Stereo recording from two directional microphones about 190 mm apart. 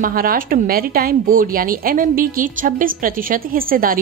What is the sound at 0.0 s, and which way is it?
A woman's voice, 50° right (ahead or behind).